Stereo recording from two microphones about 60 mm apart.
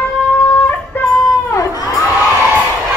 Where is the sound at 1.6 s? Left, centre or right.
Left.